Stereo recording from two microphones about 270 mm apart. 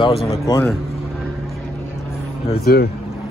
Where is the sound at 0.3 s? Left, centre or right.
Centre.